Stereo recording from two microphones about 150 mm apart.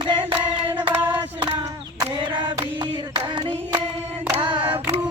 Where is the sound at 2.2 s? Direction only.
30° right (ahead or behind).